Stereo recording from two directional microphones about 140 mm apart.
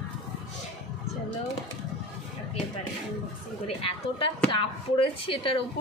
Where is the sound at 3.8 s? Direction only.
40° left (ahead or behind).